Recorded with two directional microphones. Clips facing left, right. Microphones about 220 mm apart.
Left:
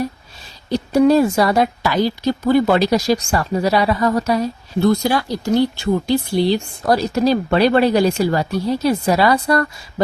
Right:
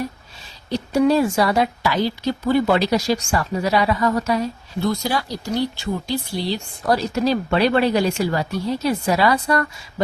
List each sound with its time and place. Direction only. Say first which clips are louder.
0.7 s a woman's voice: left 4 dB; 40° left (ahead or behind)
4.8 s speech: left 6 dB; 55° left (ahead or behind)
6.8 s a woman's voice: left 3 dB; 40° left (ahead or behind)